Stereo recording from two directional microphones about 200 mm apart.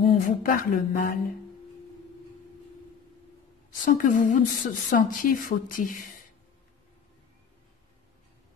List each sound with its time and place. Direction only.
0.0 s a woman's voice: 45° left (ahead or behind)
3.8 s a woman's voice: 40° left (ahead or behind)